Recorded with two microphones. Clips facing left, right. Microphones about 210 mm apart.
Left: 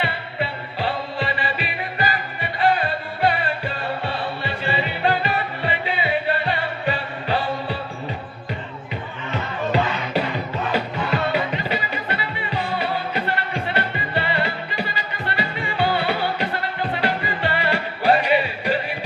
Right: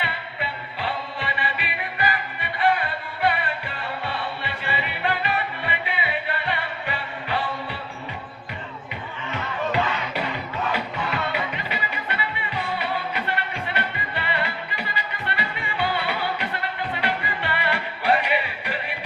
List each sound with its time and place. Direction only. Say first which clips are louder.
0.0 s music: left 5 dB; 30° left (ahead or behind)
9.3 s music: left 3 dB; 30° left (ahead or behind)